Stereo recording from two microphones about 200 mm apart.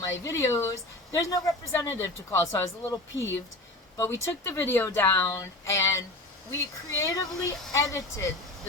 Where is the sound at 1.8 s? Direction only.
15° left (ahead or behind).